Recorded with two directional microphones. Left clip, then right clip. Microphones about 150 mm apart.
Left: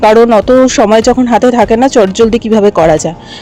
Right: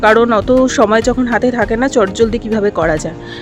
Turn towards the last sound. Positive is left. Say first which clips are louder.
# left 7 dB
turn(degrees=40)  # may be behind; listen again after turning